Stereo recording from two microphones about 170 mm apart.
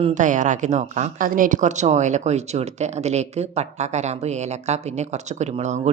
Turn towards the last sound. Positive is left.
turn(degrees=-45)  # may be behind; listen again after turning